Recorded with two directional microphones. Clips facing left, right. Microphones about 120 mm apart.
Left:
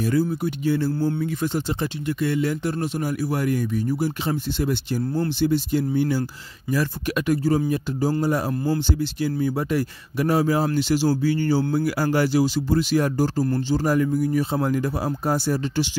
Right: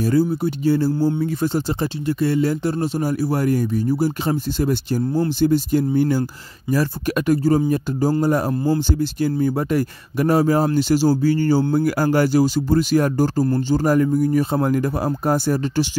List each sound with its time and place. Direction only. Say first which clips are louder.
0.0 s speech: right 4 dB; 30° right (ahead or behind); by 15.9 s 45° right (ahead or behind)